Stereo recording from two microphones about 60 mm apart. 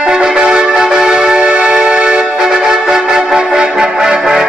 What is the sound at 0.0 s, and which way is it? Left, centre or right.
Music, centre.